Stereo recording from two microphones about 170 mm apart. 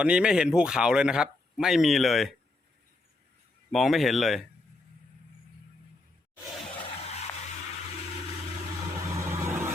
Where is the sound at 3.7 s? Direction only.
Centre (ahead or behind).